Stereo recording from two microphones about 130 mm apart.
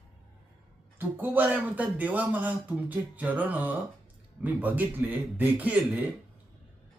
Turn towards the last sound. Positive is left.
turn(degrees=-10)  # may be behind; listen again after turning